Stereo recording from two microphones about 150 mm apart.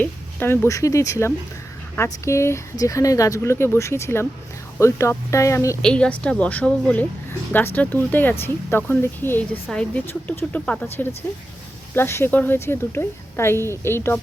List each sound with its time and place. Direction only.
0.0 s speech: 15° left (ahead or behind)
5.8 s speech: 5° left (ahead or behind)
11.9 s speech: 15° left (ahead or behind)